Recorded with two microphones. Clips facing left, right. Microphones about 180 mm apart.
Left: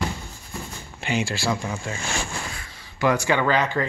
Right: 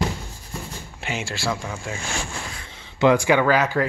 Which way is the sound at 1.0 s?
Centre (ahead or behind).